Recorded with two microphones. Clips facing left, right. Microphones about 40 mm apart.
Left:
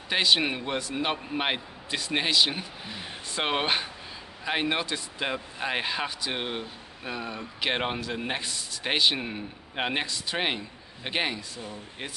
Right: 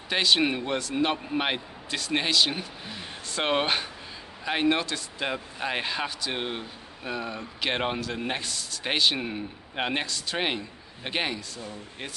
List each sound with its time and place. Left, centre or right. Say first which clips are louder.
0.1 s speech: right 1 dB; centre